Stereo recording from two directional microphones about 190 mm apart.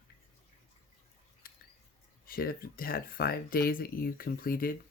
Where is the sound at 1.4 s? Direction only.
50° left (ahead or behind).